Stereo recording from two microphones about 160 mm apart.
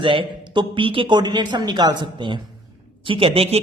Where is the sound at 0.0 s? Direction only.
30° right (ahead or behind).